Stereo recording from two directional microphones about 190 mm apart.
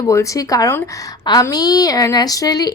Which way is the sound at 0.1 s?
15° left (ahead or behind).